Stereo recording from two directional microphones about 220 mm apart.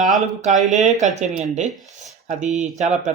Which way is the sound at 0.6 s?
35° right (ahead or behind).